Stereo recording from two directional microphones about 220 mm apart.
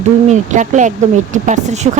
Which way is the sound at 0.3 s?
35° right (ahead or behind).